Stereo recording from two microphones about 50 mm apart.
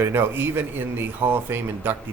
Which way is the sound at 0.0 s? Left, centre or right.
Right.